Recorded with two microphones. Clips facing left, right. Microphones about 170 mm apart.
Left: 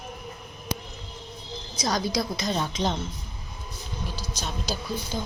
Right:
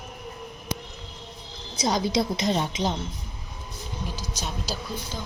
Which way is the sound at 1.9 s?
20° right (ahead or behind).